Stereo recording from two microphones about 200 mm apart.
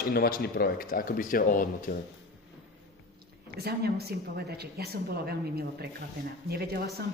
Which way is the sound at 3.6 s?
55° right (ahead or behind).